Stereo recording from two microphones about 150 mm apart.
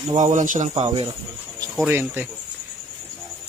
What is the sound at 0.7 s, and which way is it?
Speech, 40° right (ahead or behind).